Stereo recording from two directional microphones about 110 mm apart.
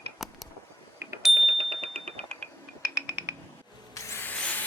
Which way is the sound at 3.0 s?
20° right (ahead or behind).